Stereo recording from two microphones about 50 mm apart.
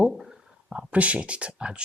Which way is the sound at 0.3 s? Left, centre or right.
Right.